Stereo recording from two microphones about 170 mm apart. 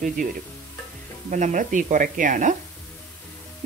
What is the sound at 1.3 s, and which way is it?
Speech, 50° right (ahead or behind).